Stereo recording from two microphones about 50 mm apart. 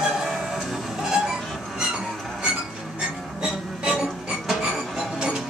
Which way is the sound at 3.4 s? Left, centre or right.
Centre.